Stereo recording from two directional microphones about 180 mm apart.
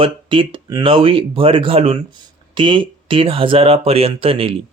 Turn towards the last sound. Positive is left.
turn(degrees=-30)  # may be behind; listen again after turning